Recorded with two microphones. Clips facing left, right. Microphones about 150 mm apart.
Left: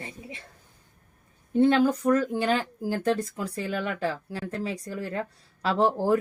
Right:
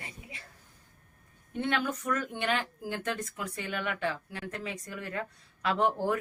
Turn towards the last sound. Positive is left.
turn(degrees=30)  # may be behind; listen again after turning